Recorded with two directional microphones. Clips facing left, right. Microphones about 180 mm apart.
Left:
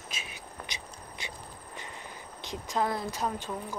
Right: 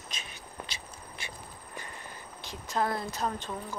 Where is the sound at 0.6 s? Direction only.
20° left (ahead or behind).